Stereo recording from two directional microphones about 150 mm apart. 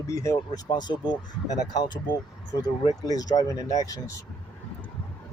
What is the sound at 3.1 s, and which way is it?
Speech, 25° left (ahead or behind).